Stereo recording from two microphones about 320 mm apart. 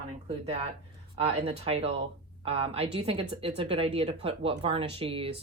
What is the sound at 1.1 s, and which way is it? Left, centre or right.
Speech, centre.